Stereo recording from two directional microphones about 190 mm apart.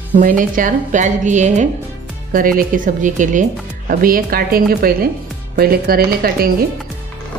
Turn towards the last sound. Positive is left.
turn(degrees=-50)  # may be behind; listen again after turning